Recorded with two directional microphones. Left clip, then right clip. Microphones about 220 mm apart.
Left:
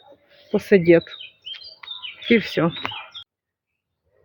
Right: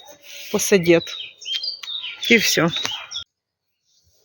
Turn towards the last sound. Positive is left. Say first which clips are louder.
# right 2 dB
turn(degrees=0)  # may be behind; listen again after turning